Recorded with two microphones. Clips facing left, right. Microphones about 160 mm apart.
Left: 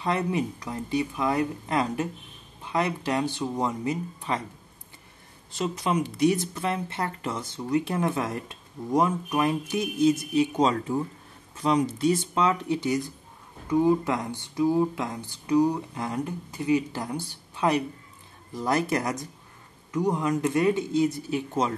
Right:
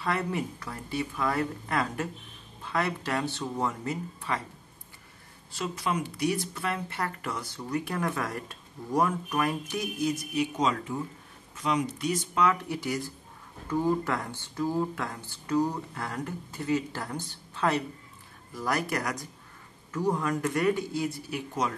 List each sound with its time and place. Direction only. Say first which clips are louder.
0.0 s speech: left 4 dB; 20° left (ahead or behind)
5.5 s speech: left 4 dB; 20° left (ahead or behind)